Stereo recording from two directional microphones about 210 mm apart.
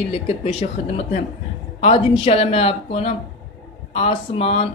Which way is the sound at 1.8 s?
30° left (ahead or behind).